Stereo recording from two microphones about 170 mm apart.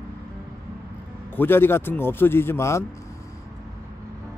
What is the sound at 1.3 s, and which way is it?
Speech, 15° left (ahead or behind).